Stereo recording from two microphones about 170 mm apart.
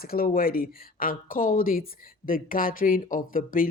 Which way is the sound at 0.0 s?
60° left (ahead or behind).